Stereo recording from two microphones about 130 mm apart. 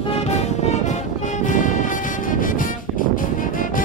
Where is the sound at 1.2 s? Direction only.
70° left (ahead or behind).